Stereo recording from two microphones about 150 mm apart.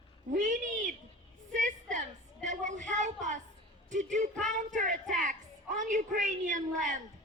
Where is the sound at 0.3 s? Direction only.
55° right (ahead or behind).